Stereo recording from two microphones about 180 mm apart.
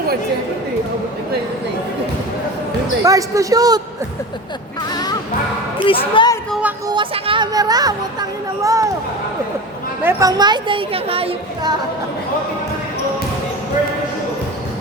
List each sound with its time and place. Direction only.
3.0 s a woman's voice: 20° right (ahead or behind)
5.8 s speech: 30° left (ahead or behind)
6.5 s a sound: 10° right (ahead or behind)
6.8 s speech: 25° right (ahead or behind)
10.0 s a woman's voice: 15° right (ahead or behind)